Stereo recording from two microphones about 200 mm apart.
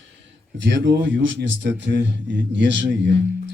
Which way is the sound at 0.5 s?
65° right (ahead or behind).